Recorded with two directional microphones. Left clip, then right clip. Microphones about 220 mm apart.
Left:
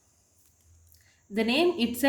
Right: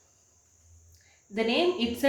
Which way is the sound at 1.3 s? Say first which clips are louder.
Left 1 dB; 40° left (ahead or behind).